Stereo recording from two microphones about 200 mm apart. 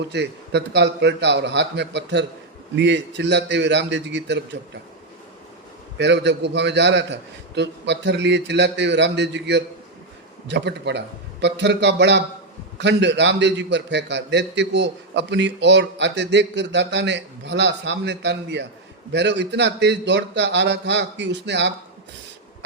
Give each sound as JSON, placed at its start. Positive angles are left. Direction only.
{"t": 0.1, "sound": "a man's voice", "side_deg": -60}
{"t": 6.0, "sound": "a man's voice", "side_deg": -60}